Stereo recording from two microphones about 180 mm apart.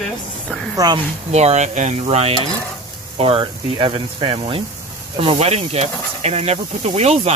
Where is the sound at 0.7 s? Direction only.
20° right (ahead or behind).